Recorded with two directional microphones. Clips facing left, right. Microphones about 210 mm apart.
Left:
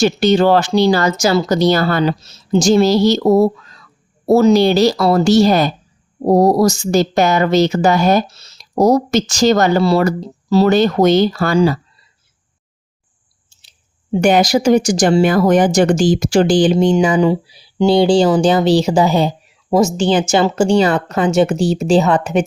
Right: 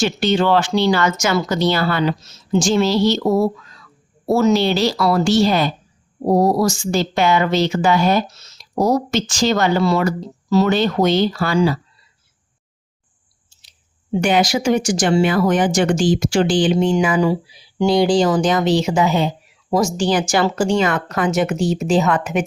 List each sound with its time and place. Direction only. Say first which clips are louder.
0.0 s speech: left 5 dB; 40° left (ahead or behind)
13.5 s a sound: left 2 dB; 25° left (ahead or behind)
14.2 s a woman's voice: left 4 dB; 40° left (ahead or behind)
19.7 s speech: left 4 dB; 25° left (ahead or behind)